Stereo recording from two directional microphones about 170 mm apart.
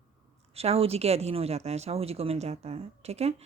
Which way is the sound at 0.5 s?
35° right (ahead or behind).